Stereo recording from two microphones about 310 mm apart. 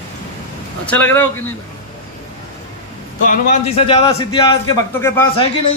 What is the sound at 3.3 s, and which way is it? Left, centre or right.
A man's voice, centre.